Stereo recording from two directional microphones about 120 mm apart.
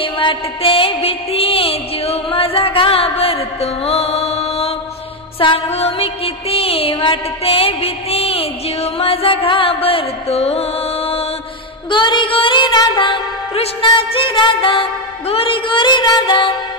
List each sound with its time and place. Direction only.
0.0 s music: 45° left (ahead or behind)
11.9 s music: 40° left (ahead or behind)